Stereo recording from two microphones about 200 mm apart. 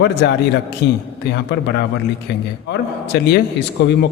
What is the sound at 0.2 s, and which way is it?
A man's voice, 60° left (ahead or behind).